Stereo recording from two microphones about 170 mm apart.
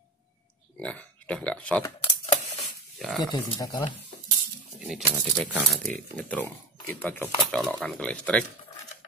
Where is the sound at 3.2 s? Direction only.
20° left (ahead or behind).